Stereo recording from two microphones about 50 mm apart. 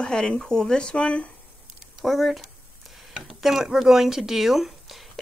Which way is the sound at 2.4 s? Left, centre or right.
Centre.